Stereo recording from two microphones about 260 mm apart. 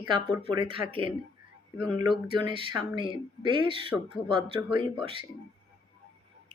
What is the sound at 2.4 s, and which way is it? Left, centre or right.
A woman's voice, centre.